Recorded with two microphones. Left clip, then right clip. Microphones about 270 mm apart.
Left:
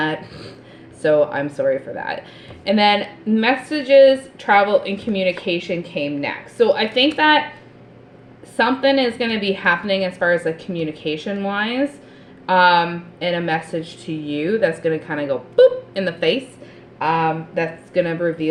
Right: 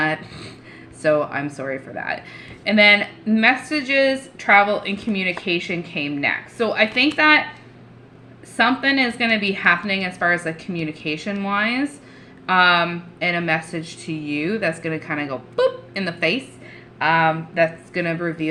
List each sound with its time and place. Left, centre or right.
1.0 s speech: centre
8.5 s speech: centre